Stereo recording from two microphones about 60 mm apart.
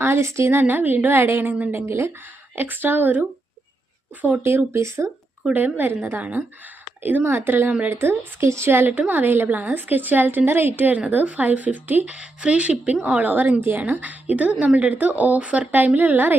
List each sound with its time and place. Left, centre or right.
0.0 s speech: right
0.6 s a woman's voice: right
1.9 s speech: right
2.2 s a woman's voice: right
4.4 s speech: right
5.5 s a woman's voice: right
8.9 s a woman's voice: right
12.1 s a woman's voice: centre
13.3 s a woman's voice: right